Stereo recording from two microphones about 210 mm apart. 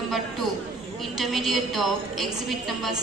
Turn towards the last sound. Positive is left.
turn(degrees=0)  # may be behind; listen again after turning